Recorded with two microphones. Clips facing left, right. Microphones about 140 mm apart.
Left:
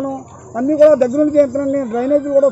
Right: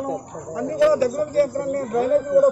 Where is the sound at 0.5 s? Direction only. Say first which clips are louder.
Left 9 dB; 60° left (ahead or behind); by 2.5 s 85° left.